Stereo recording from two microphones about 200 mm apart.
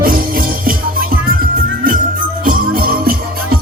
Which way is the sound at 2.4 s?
45° right (ahead or behind).